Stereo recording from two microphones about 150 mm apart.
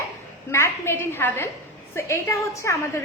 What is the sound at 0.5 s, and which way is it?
A woman's voice, 15° left (ahead or behind).